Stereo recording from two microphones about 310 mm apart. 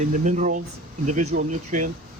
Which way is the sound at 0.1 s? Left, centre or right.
Right.